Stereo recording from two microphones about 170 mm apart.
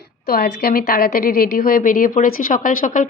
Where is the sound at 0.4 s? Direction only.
60° left (ahead or behind).